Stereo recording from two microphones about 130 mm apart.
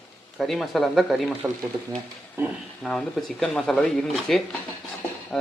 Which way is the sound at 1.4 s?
20° right (ahead or behind).